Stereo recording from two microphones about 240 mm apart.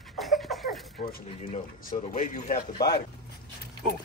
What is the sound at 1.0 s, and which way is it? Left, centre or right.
Speech, left.